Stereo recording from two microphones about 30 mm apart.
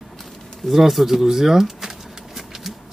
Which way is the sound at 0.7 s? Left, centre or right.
Centre.